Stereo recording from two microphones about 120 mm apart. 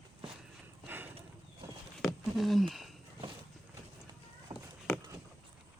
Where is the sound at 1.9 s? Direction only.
Centre (ahead or behind).